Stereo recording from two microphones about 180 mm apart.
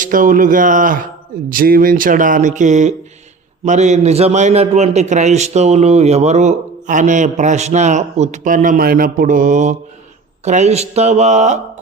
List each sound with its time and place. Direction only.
0.0 s a man's voice: 50° right (ahead or behind)